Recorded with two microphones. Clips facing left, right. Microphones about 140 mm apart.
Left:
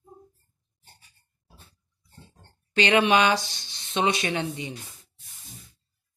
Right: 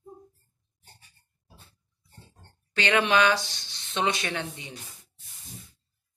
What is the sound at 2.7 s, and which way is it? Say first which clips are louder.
Speech: left 3 dB; 20° left (ahead or behind).